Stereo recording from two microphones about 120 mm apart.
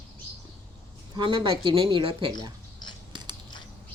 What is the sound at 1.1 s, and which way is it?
Speech, 40° right (ahead or behind).